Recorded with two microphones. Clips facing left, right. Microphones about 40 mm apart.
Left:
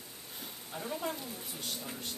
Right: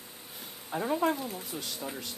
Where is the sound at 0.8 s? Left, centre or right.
Right.